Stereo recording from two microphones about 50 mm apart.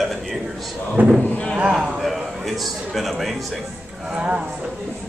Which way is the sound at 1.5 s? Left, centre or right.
Centre.